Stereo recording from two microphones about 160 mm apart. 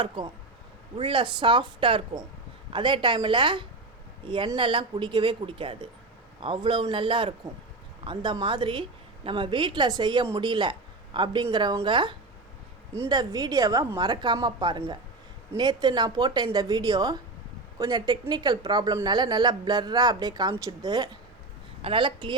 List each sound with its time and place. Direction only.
0.9 s a woman's voice: 30° right (ahead or behind)